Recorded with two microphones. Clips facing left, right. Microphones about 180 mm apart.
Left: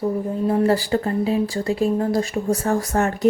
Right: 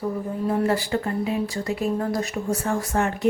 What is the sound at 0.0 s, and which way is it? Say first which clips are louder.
Speech: left 4 dB; 25° left (ahead or behind).